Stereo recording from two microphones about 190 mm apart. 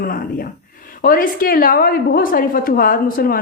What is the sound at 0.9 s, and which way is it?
A woman's voice, 45° left (ahead or behind).